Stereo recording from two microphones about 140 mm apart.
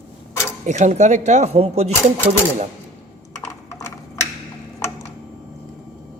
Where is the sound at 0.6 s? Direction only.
55° right (ahead or behind).